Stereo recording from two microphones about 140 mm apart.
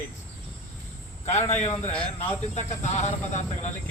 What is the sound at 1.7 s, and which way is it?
Speech, 15° left (ahead or behind).